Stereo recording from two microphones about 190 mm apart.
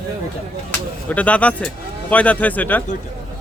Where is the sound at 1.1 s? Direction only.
5° left (ahead or behind).